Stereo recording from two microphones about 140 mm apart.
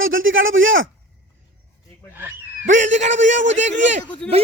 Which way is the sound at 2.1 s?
15° right (ahead or behind).